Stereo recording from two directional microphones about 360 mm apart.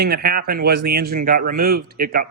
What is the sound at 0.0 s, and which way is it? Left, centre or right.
Speech, right.